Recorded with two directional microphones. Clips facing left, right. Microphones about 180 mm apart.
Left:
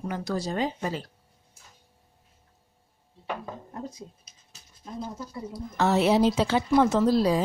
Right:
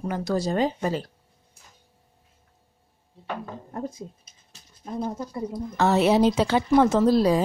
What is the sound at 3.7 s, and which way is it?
Speech, 50° right (ahead or behind).